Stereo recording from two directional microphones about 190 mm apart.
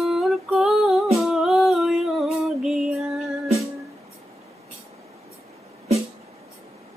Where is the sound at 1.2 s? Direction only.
Centre (ahead or behind).